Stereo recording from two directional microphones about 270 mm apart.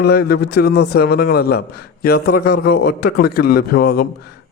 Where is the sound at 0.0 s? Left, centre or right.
Left.